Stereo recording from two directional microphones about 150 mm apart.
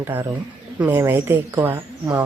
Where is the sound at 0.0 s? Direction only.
15° right (ahead or behind).